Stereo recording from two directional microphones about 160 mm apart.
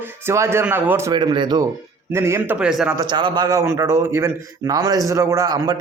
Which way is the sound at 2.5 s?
5° right (ahead or behind).